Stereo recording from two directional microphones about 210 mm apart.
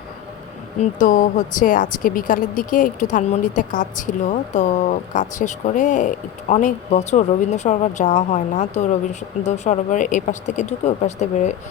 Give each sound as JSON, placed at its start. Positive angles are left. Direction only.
{"t": 0.8, "sound": "speech", "side_deg": 35}